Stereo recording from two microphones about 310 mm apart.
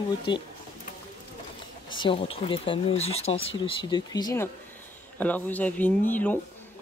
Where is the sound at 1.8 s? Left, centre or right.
Centre.